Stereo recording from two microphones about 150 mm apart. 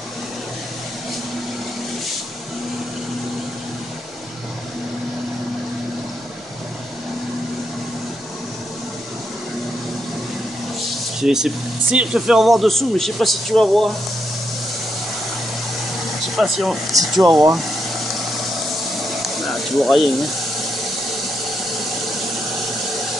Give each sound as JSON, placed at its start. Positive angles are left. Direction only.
{"t": 11.1, "sound": "speech", "side_deg": -5}
{"t": 16.3, "sound": "speech", "side_deg": 0}
{"t": 17.2, "sound": "speech", "side_deg": -20}
{"t": 19.2, "sound": "snake", "side_deg": 0}